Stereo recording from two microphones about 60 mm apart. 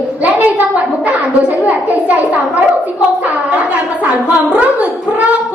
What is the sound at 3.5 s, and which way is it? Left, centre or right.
A woman's voice, right.